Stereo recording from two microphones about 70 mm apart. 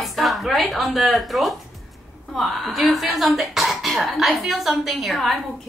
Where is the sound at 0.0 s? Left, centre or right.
Centre.